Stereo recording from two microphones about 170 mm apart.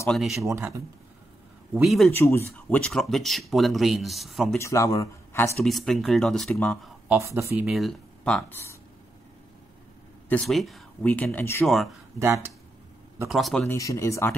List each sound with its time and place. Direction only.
0.1 s speech: centre (ahead or behind)
0.5 s speech: 15° right (ahead or behind)
1.7 s speech: centre (ahead or behind)
2.1 s speech: 15° left (ahead or behind)
4.6 s speech: 15° left (ahead or behind)
5.6 s speech: centre (ahead or behind)
7.1 s speech: 15° right (ahead or behind)
7.6 s speech: centre (ahead or behind)
10.3 s speech: centre (ahead or behind)
11.6 s speech: centre (ahead or behind)
12.2 s speech: 15° right (ahead or behind)
13.3 s speech: centre (ahead or behind)
13.7 s speech: 20° left (ahead or behind)